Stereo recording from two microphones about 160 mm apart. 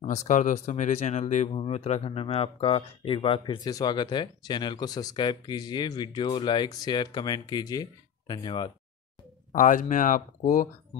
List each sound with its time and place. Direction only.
0.0 s speech: 50° left (ahead or behind); by 8.6 s 30° left (ahead or behind)
9.5 s speech: 55° left (ahead or behind)